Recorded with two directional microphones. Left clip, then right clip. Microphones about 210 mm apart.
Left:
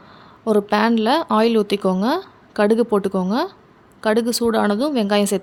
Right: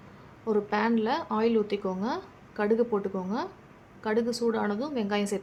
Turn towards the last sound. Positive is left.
turn(degrees=50)  # may be behind; listen again after turning